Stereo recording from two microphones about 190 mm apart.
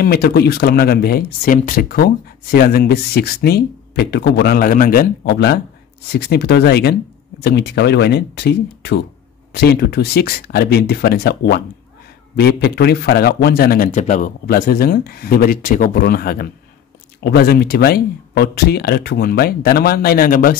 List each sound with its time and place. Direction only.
0.0 s a man's voice: 55° left (ahead or behind)